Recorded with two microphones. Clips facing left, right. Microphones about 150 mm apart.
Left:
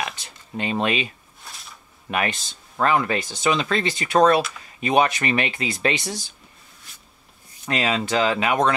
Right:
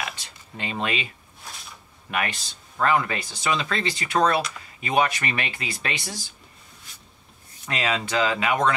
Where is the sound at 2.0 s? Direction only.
30° left (ahead or behind).